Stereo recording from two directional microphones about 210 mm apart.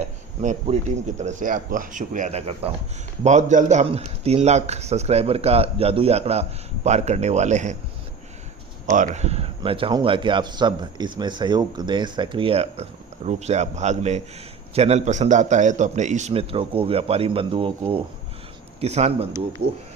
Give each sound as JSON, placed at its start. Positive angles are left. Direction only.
{"t": 0.0, "sound": "a man's voice", "side_deg": -35}
{"t": 8.9, "sound": "a man's voice", "side_deg": -35}